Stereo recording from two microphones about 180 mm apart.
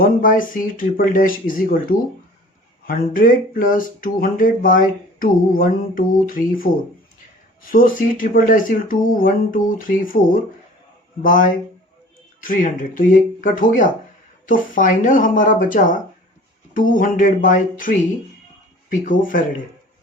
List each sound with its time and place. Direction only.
0.0 s speech: 50° left (ahead or behind)
19.0 s speech: 50° left (ahead or behind)